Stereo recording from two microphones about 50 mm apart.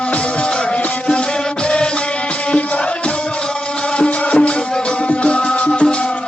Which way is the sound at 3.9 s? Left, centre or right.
Left.